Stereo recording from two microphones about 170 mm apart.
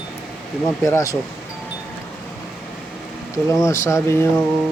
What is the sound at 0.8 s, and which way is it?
Speech, 20° left (ahead or behind).